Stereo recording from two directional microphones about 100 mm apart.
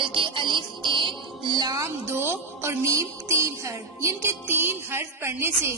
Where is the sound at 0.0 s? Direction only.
60° right (ahead or behind); by 1.8 s 40° right (ahead or behind).